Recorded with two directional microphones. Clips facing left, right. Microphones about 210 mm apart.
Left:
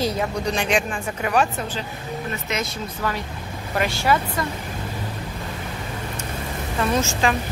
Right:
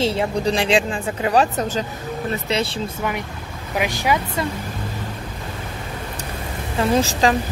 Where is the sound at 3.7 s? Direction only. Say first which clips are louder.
Even; 15° right (ahead or behind).